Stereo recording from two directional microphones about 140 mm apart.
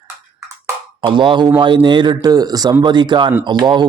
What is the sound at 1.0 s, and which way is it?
A man's voice, 35° right (ahead or behind).